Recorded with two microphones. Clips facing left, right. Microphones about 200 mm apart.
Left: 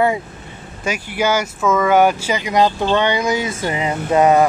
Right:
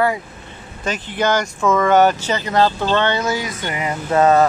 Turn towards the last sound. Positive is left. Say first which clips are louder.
# left 1 dB
turn(degrees=15)  # may be behind; listen again after turning